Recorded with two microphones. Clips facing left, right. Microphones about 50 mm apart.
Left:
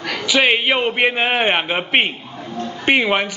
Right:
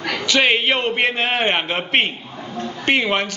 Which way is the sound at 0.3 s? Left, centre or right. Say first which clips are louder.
Left 1 dB; centre.